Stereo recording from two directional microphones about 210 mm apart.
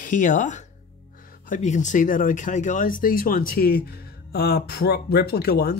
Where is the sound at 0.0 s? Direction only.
40° left (ahead or behind).